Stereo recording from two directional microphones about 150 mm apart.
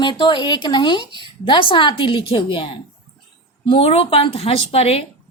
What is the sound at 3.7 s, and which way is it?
A woman's voice, 40° left (ahead or behind).